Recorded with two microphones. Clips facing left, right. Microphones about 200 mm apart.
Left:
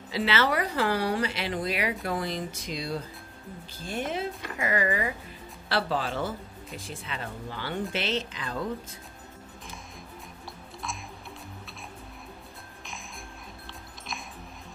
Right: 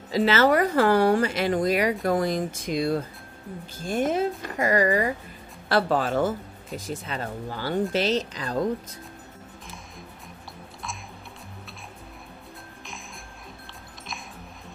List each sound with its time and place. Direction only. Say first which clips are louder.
0.1 s speech: right 7 dB; 45° right (ahead or behind)